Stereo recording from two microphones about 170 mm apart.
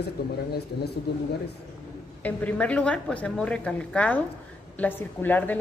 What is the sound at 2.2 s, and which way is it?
A woman's voice, 10° left (ahead or behind).